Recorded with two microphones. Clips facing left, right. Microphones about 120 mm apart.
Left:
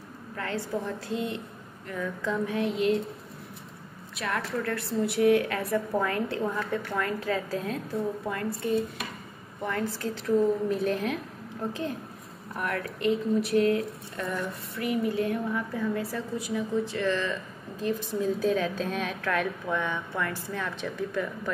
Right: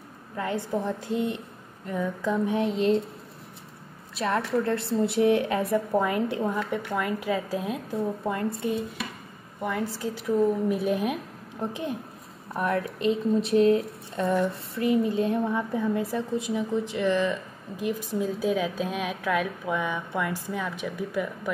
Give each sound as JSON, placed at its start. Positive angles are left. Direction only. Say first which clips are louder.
{"t": 0.4, "sound": "speech", "louder": "right 3 dB", "side_deg": -20}
{"t": 4.2, "sound": "a woman's voice", "louder": "right 5 dB", "side_deg": -30}
{"t": 9.6, "sound": "a woman's voice", "louder": "right 1 dB", "side_deg": -10}
{"t": 12.5, "sound": "a woman's voice", "louder": "right 5 dB", "side_deg": -20}